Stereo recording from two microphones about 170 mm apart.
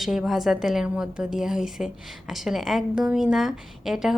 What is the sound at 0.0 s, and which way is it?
A woman's voice, centre (ahead or behind).